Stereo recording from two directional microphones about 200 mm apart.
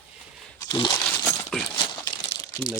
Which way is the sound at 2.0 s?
20° left (ahead or behind).